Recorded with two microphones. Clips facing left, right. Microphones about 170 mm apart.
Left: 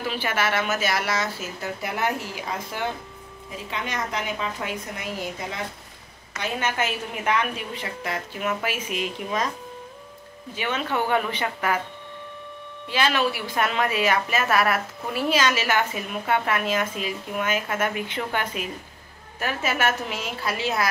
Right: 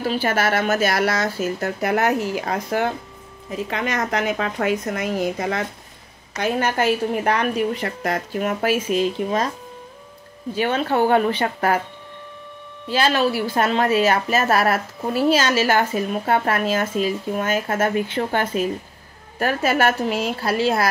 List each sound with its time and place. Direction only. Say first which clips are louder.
0.0 s speech: right 5 dB; 40° right (ahead or behind); by 2.9 s 60° right (ahead or behind)
3.7 s a woman's voice: right 6 dB; 70° right (ahead or behind)
6.3 s a woman's voice: right 6 dB; 40° right (ahead or behind)
10.5 s a woman's voice: right 6 dB; 40° right (ahead or behind)
12.9 s a woman's voice: right 4 dB; 35° right (ahead or behind)